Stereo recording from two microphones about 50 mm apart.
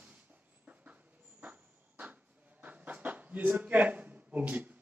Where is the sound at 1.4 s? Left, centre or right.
Right.